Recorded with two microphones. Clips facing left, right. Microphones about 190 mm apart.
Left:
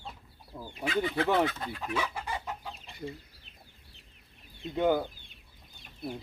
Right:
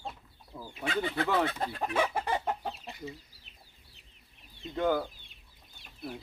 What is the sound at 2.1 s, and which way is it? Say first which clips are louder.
Chicken: right 6 dB; 55° right (ahead or behind).